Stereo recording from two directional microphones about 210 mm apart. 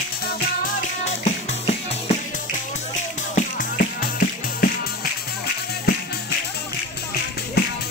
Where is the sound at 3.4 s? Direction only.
40° left (ahead or behind).